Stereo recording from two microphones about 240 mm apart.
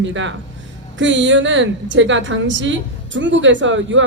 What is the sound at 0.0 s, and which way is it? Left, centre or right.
Speech, right.